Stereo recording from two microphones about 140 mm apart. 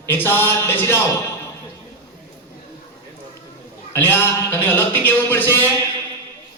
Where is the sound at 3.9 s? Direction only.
15° left (ahead or behind).